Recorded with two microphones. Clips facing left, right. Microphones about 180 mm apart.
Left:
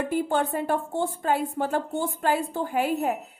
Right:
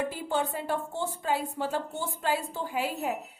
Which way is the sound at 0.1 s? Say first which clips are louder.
Left 6 dB; 55° left (ahead or behind).